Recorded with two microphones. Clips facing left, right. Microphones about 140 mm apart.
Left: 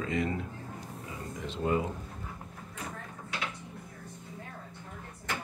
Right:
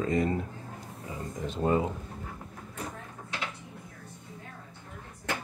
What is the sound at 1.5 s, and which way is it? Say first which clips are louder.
Speech: right 3 dB; 35° right (ahead or behind).